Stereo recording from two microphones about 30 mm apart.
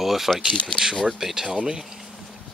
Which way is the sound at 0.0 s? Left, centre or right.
Centre.